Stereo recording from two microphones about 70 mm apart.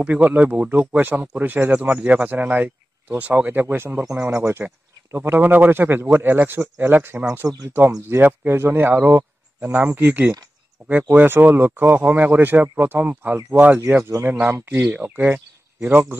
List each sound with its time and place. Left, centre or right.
0.0 s a man's voice: centre
7.4 s speech: right
8.1 s a man's voice: right
13.8 s a man's voice: right